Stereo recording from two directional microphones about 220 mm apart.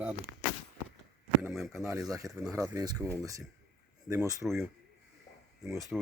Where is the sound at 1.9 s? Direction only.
15° right (ahead or behind).